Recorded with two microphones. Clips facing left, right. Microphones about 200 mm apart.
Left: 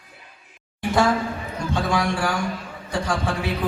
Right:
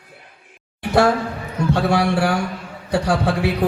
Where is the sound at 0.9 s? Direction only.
65° right (ahead or behind).